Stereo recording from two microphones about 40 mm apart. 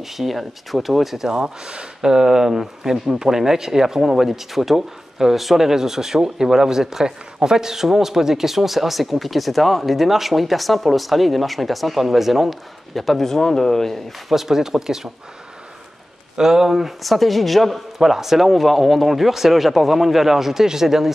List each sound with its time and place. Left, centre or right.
0.2 s speech: centre
1.4 s speech: right; by 14.0 s centre
14.3 s speech: centre
16.3 s speech: centre